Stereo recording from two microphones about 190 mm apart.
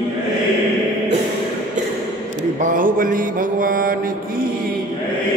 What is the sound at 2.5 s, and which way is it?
Mantra, 45° right (ahead or behind).